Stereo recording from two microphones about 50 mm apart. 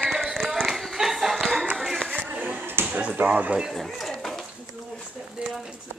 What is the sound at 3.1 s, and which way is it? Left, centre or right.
Speech, right.